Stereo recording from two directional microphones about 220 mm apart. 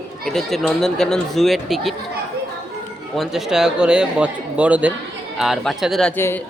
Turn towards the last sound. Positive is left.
turn(degrees=10)  # may be behind; listen again after turning